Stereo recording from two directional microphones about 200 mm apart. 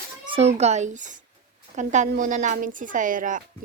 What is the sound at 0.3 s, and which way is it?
Speech, 30° right (ahead or behind).